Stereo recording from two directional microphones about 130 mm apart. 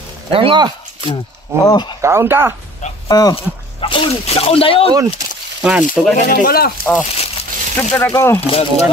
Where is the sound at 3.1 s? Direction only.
30° left (ahead or behind).